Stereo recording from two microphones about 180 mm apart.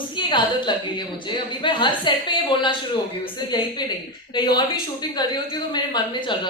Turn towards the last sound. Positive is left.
turn(degrees=25)  # may be behind; listen again after turning